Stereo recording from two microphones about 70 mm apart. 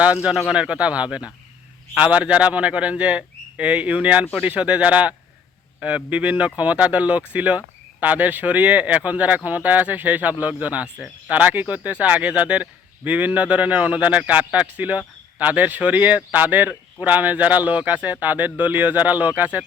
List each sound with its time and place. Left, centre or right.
0.0 s a man's voice: centre